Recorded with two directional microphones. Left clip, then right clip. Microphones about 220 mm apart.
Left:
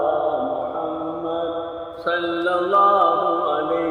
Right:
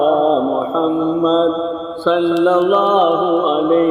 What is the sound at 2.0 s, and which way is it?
Music, 50° right (ahead or behind).